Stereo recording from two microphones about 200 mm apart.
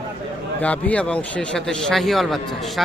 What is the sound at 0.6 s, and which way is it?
A man's voice, 5° left (ahead or behind).